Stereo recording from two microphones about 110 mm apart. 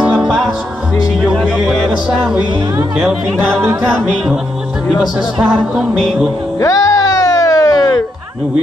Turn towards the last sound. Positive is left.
turn(degrees=35)  # may be behind; listen again after turning